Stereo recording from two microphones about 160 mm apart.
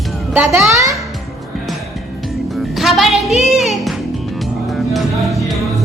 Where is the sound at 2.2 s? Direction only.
Centre (ahead or behind).